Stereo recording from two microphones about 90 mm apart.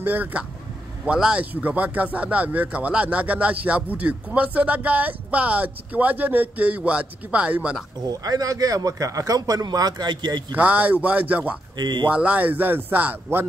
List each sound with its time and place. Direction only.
0.0 s speech: 20° right (ahead or behind)
8.0 s speech: 45° right (ahead or behind)
10.5 s speech: 15° right (ahead or behind)
11.7 s speech: 55° right (ahead or behind)
12.1 s speech: 15° right (ahead or behind)